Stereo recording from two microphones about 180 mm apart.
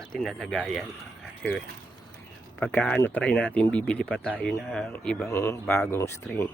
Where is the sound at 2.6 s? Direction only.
10° left (ahead or behind).